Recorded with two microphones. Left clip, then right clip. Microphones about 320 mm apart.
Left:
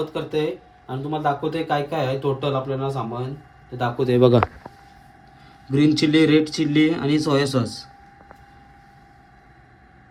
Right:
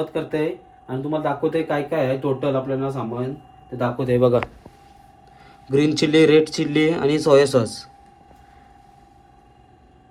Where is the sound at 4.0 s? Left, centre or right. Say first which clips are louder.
Left 1 dB; left.